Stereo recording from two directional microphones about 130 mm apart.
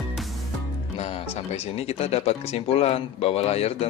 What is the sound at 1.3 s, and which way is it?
Speech, 50° left (ahead or behind).